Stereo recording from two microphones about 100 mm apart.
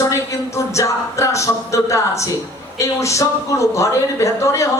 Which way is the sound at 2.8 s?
30° left (ahead or behind).